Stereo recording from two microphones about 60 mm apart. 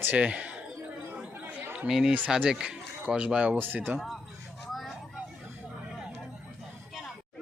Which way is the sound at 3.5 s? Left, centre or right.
Right.